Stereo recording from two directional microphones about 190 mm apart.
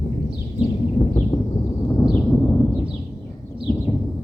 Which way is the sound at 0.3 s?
30° left (ahead or behind).